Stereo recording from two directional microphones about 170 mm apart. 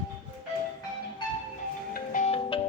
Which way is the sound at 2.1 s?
45° left (ahead or behind).